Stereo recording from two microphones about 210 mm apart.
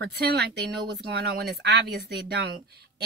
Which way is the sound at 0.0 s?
50° right (ahead or behind).